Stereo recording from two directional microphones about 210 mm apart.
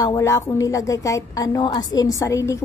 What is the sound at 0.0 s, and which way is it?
A woman's voice, 15° left (ahead or behind).